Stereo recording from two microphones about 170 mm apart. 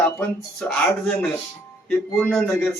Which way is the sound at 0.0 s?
15° left (ahead or behind).